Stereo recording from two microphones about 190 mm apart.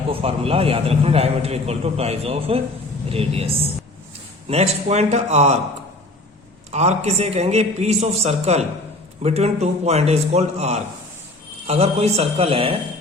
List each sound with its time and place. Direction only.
0.1 s a man's voice: 30° right (ahead or behind)
6.7 s a man's voice: 35° right (ahead or behind)